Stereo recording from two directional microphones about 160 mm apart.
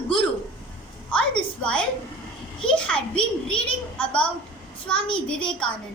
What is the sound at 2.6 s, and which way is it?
A child's voice, 5° left (ahead or behind).